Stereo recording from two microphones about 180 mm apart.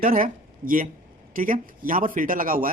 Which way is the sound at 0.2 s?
50° right (ahead or behind).